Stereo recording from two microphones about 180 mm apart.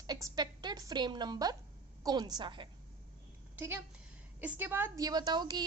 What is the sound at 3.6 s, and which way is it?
A woman's voice, 10° right (ahead or behind).